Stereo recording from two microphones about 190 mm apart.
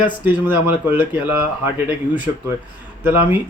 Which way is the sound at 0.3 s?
10° right (ahead or behind).